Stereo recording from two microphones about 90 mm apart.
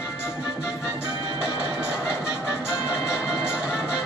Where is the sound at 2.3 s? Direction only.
40° left (ahead or behind).